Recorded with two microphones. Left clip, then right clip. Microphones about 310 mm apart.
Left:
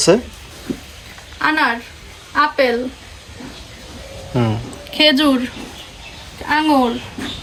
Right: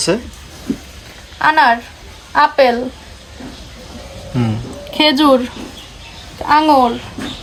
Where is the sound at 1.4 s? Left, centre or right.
Right.